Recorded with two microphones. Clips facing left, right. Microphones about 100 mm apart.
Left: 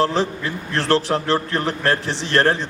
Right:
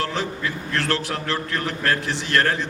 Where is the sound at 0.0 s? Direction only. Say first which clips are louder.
Left 6 dB; 30° left (ahead or behind).